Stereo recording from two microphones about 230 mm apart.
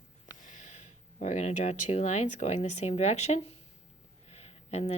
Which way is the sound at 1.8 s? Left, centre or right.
Left.